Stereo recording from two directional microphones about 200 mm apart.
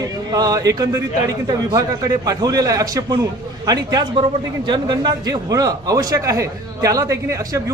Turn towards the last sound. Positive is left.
turn(degrees=-15)  # may be behind; listen again after turning